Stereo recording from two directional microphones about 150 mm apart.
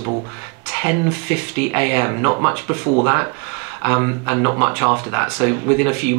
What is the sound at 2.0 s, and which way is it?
Speech, 25° right (ahead or behind).